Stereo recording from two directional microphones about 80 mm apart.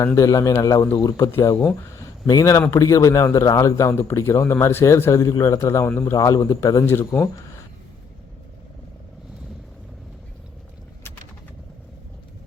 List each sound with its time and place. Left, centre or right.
0.0 s a man's voice: left